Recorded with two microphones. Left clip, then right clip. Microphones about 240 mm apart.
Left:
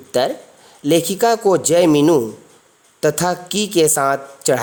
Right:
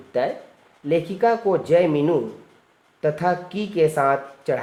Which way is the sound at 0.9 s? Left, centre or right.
Left.